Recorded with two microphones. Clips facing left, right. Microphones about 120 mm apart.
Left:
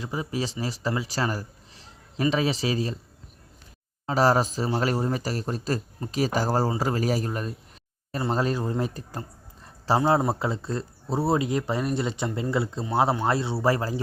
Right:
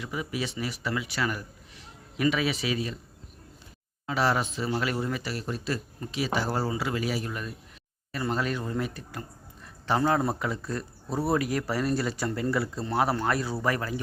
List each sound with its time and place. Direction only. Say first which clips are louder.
0.0 s a man's voice: left 3 dB; 30° left (ahead or behind)
4.0 s speech: left 5 dB; 40° left (ahead or behind)
10.0 s speech: left 2 dB; 20° left (ahead or behind)